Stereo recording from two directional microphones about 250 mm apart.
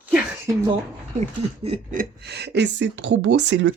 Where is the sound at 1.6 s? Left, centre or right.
Right.